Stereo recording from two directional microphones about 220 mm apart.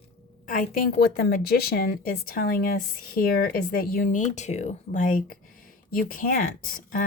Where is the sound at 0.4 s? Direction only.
40° left (ahead or behind).